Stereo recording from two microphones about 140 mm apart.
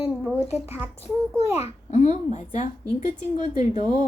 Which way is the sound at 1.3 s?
50° left (ahead or behind).